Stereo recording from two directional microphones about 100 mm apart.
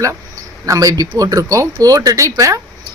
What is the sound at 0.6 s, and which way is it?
Speech, 30° right (ahead or behind).